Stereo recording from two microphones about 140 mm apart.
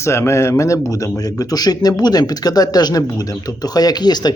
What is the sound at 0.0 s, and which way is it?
Speech, 20° left (ahead or behind).